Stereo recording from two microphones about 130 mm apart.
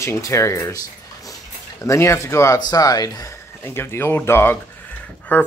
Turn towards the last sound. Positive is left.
turn(degrees=15)  # may be behind; listen again after turning